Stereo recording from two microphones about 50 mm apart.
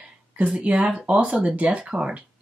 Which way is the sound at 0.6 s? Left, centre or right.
Right.